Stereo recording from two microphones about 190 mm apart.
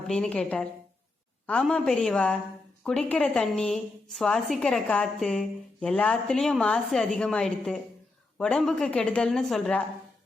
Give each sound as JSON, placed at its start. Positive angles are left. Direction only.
{"t": 0.1, "sound": "a woman's voice", "side_deg": 5}